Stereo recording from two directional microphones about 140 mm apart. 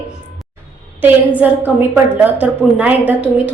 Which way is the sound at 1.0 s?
10° right (ahead or behind).